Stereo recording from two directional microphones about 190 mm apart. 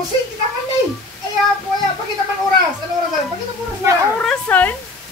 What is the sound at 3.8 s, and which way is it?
Speech, 15° right (ahead or behind).